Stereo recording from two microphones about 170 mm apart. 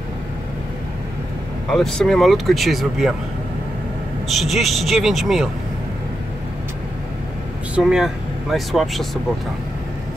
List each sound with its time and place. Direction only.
1.7 s speech: 5° left (ahead or behind)
4.3 s speech: centre (ahead or behind)
7.7 s speech: 5° right (ahead or behind)